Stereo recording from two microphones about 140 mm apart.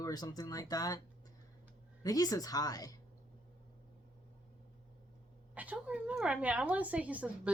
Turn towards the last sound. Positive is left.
turn(degrees=-10)  # may be behind; listen again after turning